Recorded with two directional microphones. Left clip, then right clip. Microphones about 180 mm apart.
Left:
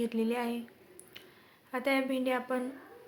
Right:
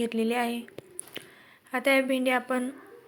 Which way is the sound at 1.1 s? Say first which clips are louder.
Right 10 dB; 20° right (ahead or behind).